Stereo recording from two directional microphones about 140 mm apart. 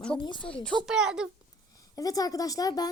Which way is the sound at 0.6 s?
Centre (ahead or behind).